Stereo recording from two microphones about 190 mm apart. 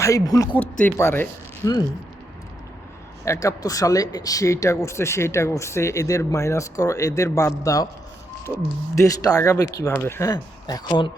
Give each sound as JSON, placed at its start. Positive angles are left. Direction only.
{"t": 0.0, "sound": "speech", "side_deg": 15}
{"t": 3.2, "sound": "speech", "side_deg": 15}
{"t": 9.0, "sound": "speech", "side_deg": 15}